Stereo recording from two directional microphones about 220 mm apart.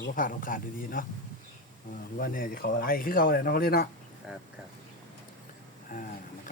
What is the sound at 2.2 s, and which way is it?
Speech, 40° left (ahead or behind).